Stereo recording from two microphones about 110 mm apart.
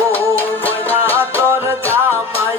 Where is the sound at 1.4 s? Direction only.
25° right (ahead or behind).